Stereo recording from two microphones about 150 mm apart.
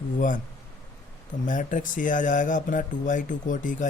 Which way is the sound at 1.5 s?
60° left (ahead or behind).